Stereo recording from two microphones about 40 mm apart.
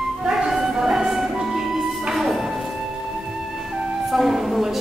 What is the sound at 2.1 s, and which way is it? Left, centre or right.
Music, centre.